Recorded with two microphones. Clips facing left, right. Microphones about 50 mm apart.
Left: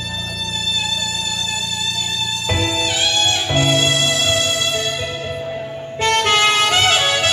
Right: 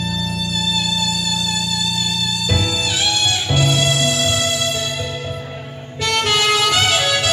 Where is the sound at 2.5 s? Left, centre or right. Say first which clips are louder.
Left 3 dB; left.